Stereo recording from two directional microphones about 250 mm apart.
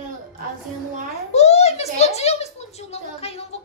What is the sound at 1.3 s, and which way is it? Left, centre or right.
A child's voice, left.